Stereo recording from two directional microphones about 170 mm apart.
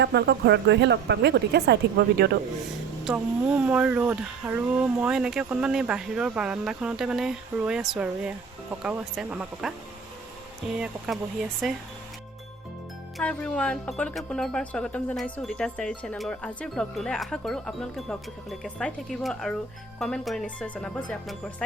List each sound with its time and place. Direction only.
0.0 s a woman's voice: 80° right
3.0 s speech: 5° right (ahead or behind)
10.8 s speech: centre (ahead or behind)
13.1 s speech: 5° left (ahead or behind)